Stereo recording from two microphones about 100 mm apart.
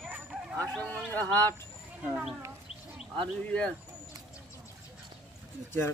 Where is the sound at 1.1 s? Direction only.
20° left (ahead or behind).